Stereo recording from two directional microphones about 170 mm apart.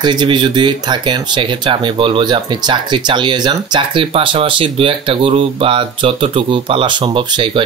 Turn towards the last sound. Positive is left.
turn(degrees=-30)  # may be behind; listen again after turning